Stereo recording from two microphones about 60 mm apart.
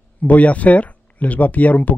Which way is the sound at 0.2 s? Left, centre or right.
Left.